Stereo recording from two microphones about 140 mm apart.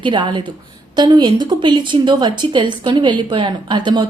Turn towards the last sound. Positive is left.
turn(degrees=-35)  # may be behind; listen again after turning